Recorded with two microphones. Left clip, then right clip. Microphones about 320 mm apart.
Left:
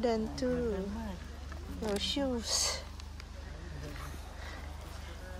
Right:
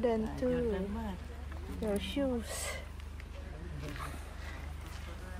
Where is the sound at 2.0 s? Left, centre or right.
Centre.